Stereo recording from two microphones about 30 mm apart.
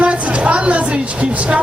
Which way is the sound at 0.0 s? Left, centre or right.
Right.